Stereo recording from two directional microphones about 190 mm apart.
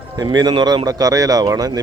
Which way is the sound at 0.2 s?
20° right (ahead or behind).